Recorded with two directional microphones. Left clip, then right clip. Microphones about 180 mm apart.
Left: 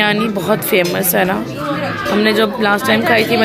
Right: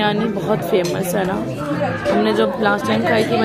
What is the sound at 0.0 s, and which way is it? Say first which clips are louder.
Speech: left 4 dB; 10° left (ahead or behind).